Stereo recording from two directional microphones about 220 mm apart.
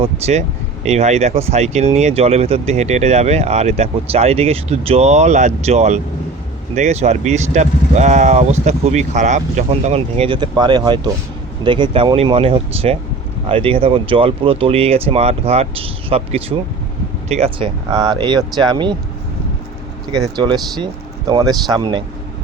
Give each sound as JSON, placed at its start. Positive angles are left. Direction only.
{"t": 0.0, "sound": "speech", "side_deg": -30}
{"t": 20.2, "sound": "speech", "side_deg": -20}